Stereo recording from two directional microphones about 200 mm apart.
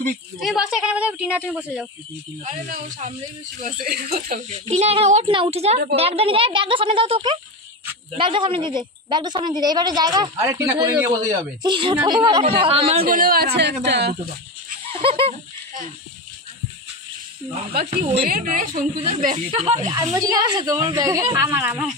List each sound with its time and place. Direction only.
0.4 s speech: centre (ahead or behind)
2.4 s speech: 35° right (ahead or behind)
3.6 s speech: 50° right (ahead or behind)
4.5 s a woman's voice: 35° right (ahead or behind)
13.0 s speech: 45° right (ahead or behind)
13.6 s a woman's voice: 55° right (ahead or behind)
14.9 s fowl: 25° right (ahead or behind)
18.1 s speech: 50° right (ahead or behind)
19.3 s a woman's voice: 30° right (ahead or behind)
19.9 s a woman's voice: 20° right (ahead or behind)